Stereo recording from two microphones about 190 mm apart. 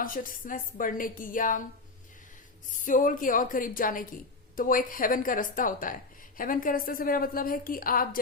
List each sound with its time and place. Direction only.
0.0 s a woman's voice: 45° left (ahead or behind)
2.8 s a woman's voice: 45° left (ahead or behind)